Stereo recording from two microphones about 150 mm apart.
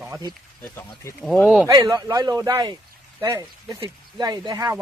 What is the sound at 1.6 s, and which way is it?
Speech, 25° right (ahead or behind).